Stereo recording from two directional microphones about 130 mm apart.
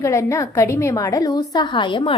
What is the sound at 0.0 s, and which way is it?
A woman's voice, 25° left (ahead or behind).